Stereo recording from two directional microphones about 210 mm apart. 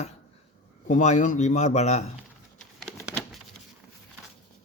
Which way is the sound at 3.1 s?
Centre (ahead or behind).